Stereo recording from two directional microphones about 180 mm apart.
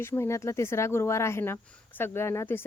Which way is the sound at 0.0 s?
15° left (ahead or behind).